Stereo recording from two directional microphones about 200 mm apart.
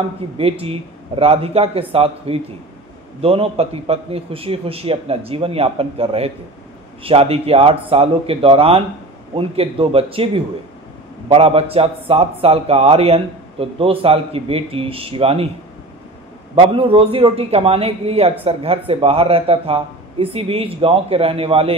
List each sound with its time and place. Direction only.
0.4 s a man's voice: 30° right (ahead or behind)
16.5 s a man's voice: 30° right (ahead or behind)